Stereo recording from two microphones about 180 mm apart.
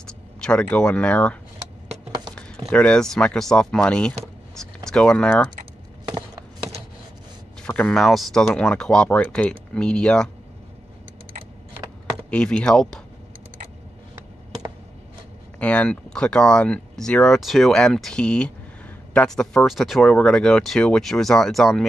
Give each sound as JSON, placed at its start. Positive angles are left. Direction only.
{"t": 0.0, "sound": "speech", "side_deg": 5}
{"t": 2.7, "sound": "speech", "side_deg": 5}
{"t": 6.0, "sound": "chopping", "side_deg": -25}
{"t": 7.6, "sound": "speech", "side_deg": 5}
{"t": 12.3, "sound": "speech", "side_deg": 5}
{"t": 15.6, "sound": "speech", "side_deg": 5}